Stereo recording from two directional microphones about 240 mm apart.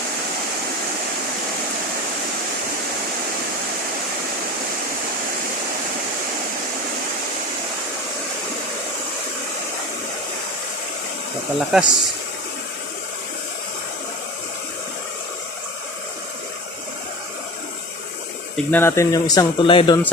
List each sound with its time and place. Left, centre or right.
11.7 s speech: centre
18.5 s speech: centre